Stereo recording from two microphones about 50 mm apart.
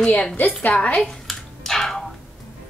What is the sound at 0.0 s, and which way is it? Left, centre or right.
Speech, left.